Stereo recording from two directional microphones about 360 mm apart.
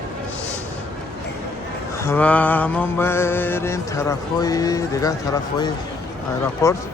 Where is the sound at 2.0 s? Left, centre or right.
Centre.